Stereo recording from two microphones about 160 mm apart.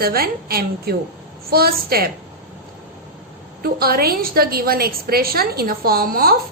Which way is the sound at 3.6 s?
70° right (ahead or behind).